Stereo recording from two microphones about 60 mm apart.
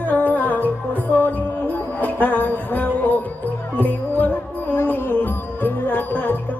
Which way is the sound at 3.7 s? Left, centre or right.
Left.